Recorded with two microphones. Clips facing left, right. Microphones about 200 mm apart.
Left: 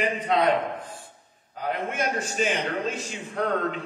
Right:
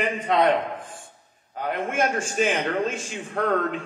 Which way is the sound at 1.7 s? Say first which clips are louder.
Right 4 dB; 50° right (ahead or behind).